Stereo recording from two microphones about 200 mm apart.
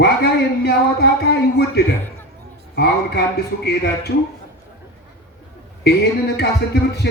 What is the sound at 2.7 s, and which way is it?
A man's voice, 55° left (ahead or behind).